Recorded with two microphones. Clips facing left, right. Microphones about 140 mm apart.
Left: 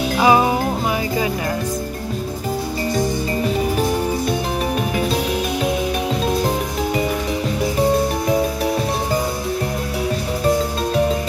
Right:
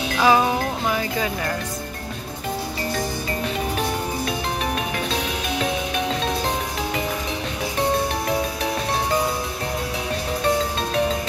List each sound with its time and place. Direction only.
0.2 s music: 15° left (ahead or behind)